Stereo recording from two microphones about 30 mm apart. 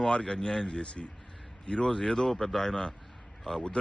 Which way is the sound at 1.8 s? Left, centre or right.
Left.